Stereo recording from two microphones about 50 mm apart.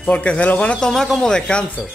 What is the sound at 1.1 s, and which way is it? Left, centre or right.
Speech, centre.